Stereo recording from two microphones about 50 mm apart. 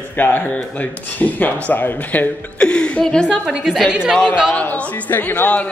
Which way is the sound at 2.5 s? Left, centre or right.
Left.